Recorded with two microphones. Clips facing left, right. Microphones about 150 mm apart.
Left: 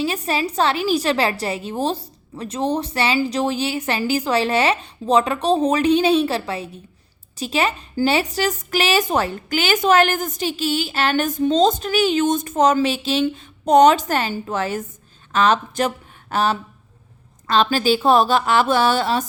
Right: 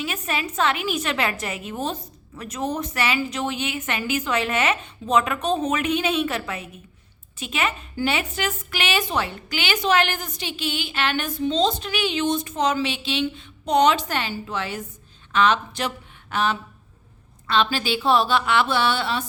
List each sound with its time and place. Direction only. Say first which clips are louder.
0.0 s a woman's voice: left 6 dB; 30° left (ahead or behind)